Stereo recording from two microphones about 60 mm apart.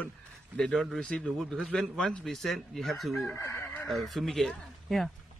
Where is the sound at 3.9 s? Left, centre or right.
Centre.